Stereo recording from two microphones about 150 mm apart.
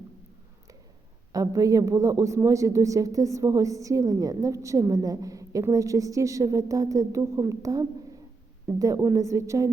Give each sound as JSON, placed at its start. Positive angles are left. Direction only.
{"t": 1.3, "sound": "a woman's voice", "side_deg": -25}